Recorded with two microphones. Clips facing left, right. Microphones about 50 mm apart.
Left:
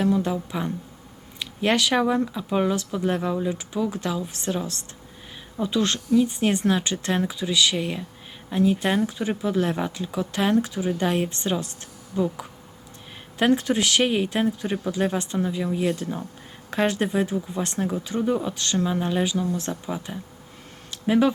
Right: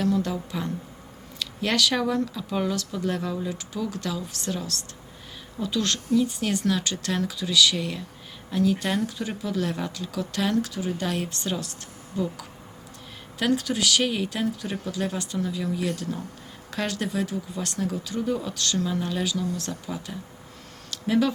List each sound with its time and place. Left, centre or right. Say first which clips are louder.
0.0 s speech: left 2 dB; left
1.4 s speech: left 2 dB; left